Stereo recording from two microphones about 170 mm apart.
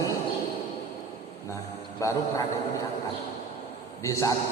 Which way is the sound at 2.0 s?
20° left (ahead or behind).